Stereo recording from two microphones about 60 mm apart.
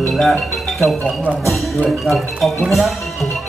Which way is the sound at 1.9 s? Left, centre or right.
Centre.